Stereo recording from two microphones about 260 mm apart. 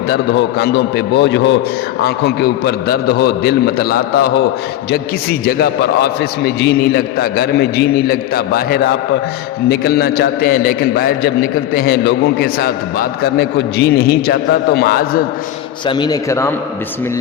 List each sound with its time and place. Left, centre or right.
0.1 s a man's voice: left
5.5 s a man's voice: left
13.7 s a man's voice: left
15.9 s a man's voice: centre